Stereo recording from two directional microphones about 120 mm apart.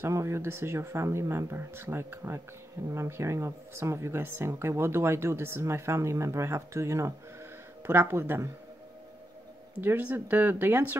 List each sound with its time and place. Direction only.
0.0 s speech: 25° right (ahead or behind)
9.8 s speech: 15° right (ahead or behind)